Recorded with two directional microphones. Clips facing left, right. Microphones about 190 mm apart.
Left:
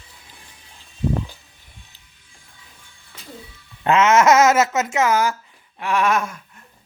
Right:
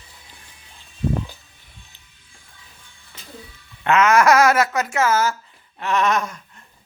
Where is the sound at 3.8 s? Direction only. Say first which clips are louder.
Left 1 dB; 25° left (ahead or behind).